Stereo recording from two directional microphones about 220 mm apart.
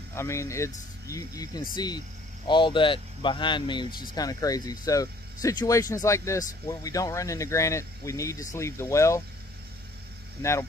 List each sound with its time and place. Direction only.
0.1 s speech: 10° left (ahead or behind)
10.4 s speech: 10° left (ahead or behind)